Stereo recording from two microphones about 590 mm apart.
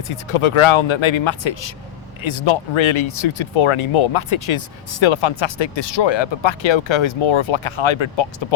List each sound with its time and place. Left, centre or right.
0.1 s speech: left